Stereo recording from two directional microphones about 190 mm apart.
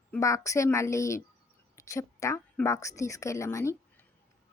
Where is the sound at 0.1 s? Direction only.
15° left (ahead or behind).